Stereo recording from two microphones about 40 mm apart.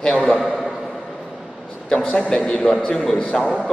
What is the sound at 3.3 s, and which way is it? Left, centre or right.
Speech, centre.